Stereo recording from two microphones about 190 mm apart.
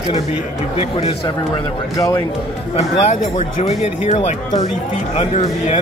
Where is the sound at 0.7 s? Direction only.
30° left (ahead or behind).